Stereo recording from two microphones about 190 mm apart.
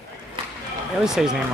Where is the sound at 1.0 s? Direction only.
5° right (ahead or behind).